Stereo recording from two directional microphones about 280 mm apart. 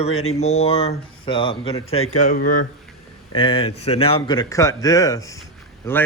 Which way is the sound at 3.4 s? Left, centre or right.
Centre.